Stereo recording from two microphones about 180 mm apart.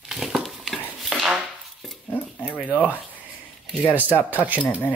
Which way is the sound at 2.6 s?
10° right (ahead or behind).